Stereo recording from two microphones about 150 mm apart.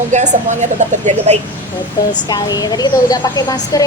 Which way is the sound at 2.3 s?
25° left (ahead or behind).